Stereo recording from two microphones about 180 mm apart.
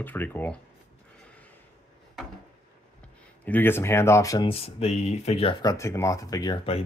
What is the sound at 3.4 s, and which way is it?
Speech, 10° left (ahead or behind).